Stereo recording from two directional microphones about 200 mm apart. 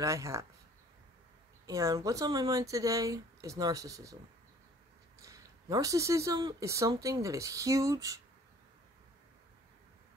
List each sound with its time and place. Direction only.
0.0 s speech: 15° right (ahead or behind)
1.7 s speech: 15° right (ahead or behind)
5.2 s speech: 15° right (ahead or behind)